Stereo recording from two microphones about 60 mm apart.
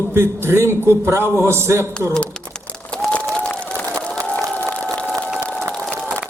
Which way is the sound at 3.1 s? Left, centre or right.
Left.